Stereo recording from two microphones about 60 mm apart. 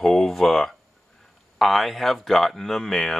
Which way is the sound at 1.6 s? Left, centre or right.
Centre.